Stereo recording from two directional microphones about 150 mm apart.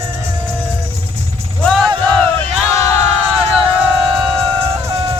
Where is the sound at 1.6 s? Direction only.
Centre (ahead or behind).